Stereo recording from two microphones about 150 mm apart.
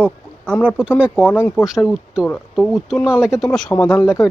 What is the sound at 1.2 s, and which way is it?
Speech, 10° left (ahead or behind).